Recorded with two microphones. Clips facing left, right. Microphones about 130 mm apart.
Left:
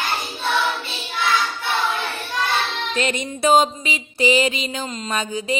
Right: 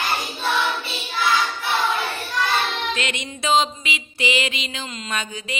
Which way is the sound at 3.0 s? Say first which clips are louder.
Left 6 dB; 40° left (ahead or behind).